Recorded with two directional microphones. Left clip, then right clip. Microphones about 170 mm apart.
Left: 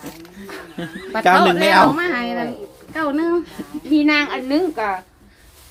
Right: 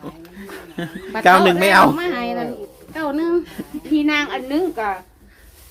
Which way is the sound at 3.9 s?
10° left (ahead or behind).